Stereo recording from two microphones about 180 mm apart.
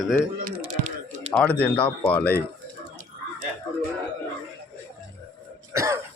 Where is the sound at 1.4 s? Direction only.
5° left (ahead or behind).